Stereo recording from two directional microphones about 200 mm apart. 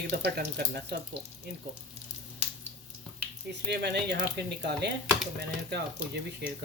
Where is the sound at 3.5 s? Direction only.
55° right (ahead or behind).